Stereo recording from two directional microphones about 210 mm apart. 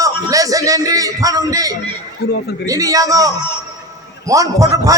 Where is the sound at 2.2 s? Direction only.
50° left (ahead or behind).